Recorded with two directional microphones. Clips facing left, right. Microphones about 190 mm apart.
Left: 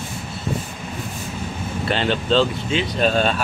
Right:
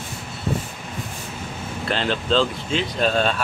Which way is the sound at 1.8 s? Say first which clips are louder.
Left 2 dB; 5° left (ahead or behind).